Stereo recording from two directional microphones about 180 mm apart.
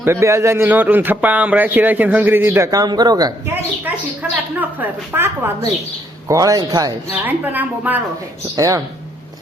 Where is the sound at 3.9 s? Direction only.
10° right (ahead or behind).